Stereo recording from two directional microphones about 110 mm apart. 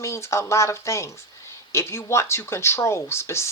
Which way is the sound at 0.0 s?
25° left (ahead or behind).